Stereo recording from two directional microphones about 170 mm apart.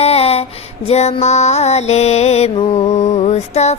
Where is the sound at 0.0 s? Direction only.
35° left (ahead or behind).